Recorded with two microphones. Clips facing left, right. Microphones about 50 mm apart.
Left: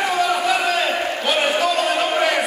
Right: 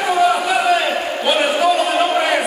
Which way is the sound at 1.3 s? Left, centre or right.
Centre.